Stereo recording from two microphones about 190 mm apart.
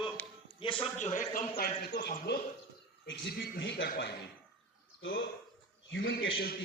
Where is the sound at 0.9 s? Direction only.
40° left (ahead or behind).